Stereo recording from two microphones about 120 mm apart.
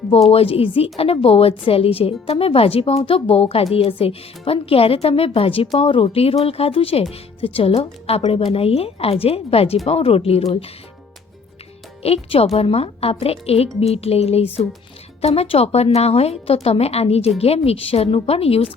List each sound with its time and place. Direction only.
0.3 s a woman's voice: 55° left (ahead or behind)
12.0 s a woman's voice: 55° left (ahead or behind)